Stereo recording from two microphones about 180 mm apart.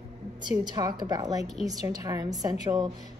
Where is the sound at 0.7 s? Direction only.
20° right (ahead or behind).